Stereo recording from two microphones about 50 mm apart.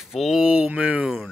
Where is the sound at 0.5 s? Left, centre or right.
Right.